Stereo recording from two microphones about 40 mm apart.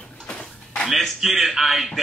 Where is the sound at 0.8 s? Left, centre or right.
Centre.